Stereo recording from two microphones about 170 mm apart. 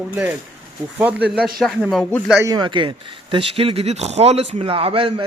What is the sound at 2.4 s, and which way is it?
Speech, 20° right (ahead or behind).